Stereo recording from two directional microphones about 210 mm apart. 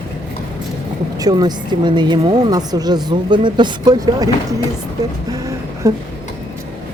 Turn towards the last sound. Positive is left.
turn(degrees=-15)  # may be behind; listen again after turning